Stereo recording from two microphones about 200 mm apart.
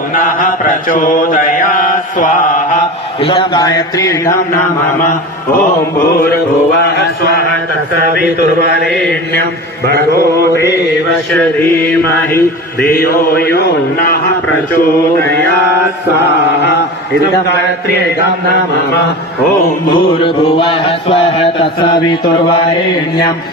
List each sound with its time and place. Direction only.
0.1 s mantra: 40° left (ahead or behind)
3.2 s mantra: 25° left (ahead or behind)
6.8 s mantra: 55° left (ahead or behind)
8.9 s mantra: 5° left (ahead or behind)
9.4 s a man's voice: 55° right (ahead or behind)
11.3 s mantra: 10° left (ahead or behind)
12.8 s a sound: 45° left (ahead or behind)
15.2 s mantra: 10° left (ahead or behind)
19.9 s mantra: 25° left (ahead or behind)